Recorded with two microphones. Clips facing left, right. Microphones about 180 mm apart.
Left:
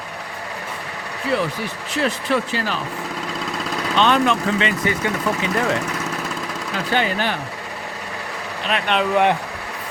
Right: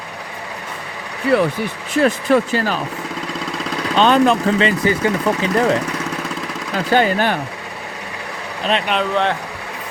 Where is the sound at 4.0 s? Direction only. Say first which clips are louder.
Right 4 dB; 35° right (ahead or behind).